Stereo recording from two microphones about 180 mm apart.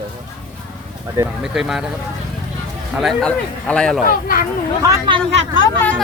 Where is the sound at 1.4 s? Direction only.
Centre (ahead or behind).